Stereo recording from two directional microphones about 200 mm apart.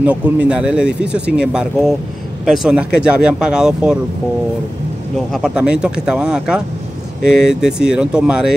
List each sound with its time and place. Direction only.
0.0 s speech: 5° right (ahead or behind)
5.3 s speech: 5° right (ahead or behind)